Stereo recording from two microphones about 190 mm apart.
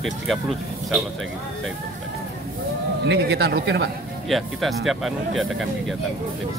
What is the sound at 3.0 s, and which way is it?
Speech, 65° right (ahead or behind).